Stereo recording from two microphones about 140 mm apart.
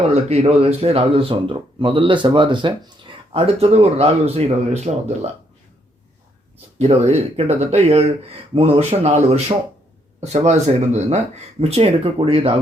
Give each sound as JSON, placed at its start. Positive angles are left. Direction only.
{"t": 0.1, "sound": "speech", "side_deg": -50}
{"t": 6.7, "sound": "speech", "side_deg": -50}
{"t": 11.6, "sound": "speech", "side_deg": -45}